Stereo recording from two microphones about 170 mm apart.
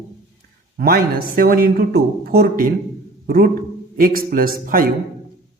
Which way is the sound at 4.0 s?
55° right (ahead or behind).